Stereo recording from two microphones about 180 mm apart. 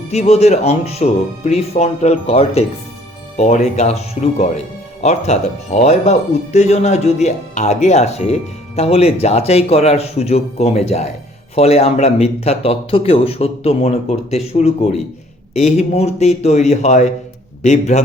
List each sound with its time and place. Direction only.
0.1 s speech: 35° left (ahead or behind)